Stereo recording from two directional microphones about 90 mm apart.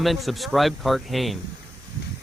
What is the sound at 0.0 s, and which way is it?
Speech, centre (ahead or behind).